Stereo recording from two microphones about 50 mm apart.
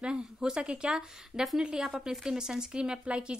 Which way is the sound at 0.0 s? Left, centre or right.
Centre.